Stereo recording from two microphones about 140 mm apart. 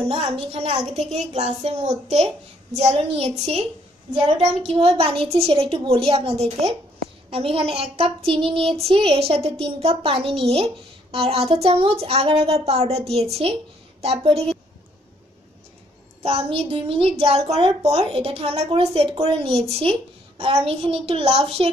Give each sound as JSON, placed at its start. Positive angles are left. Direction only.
{"t": 0.1, "sound": "a woman's voice", "side_deg": -45}
{"t": 16.2, "sound": "a woman's voice", "side_deg": -45}